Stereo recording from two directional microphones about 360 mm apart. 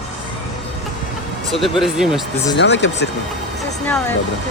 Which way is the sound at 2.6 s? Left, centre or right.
Left.